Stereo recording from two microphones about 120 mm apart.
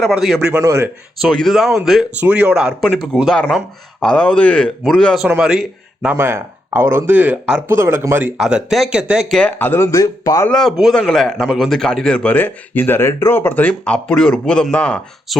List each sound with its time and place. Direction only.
0.0 s speech: centre (ahead or behind)
0.5 s speech: 25° right (ahead or behind)
1.2 s speech: centre (ahead or behind)
2.8 s a man's voice: centre (ahead or behind)
6.1 s speech: 20° right (ahead or behind)
7.7 s speech: 20° right (ahead or behind)
8.4 s speech: 5° right (ahead or behind)
9.4 s speech: 15° left (ahead or behind)
10.5 s speech: 5° left (ahead or behind)
15.3 s speech: centre (ahead or behind)